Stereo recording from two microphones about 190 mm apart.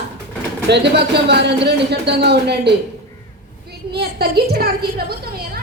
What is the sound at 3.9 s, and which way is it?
A woman's voice, 55° right (ahead or behind).